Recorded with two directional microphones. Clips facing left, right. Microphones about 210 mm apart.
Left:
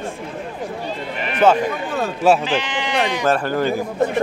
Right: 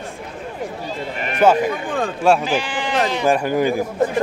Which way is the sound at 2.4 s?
10° right (ahead or behind).